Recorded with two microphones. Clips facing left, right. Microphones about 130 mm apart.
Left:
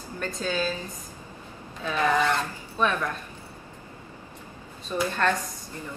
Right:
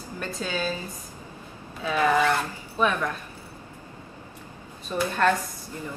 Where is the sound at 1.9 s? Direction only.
5° right (ahead or behind).